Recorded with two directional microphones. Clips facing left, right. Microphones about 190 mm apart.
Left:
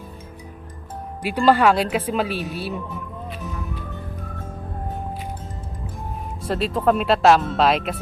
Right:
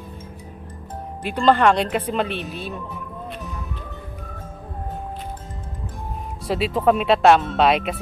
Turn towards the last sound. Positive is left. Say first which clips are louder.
# right 1 dB
turn(degrees=0)  # may be behind; listen again after turning